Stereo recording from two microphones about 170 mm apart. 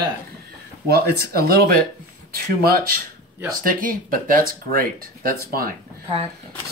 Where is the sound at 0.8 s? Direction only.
65° right (ahead or behind).